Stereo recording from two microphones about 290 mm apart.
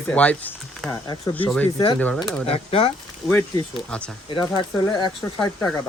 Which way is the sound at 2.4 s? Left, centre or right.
Centre.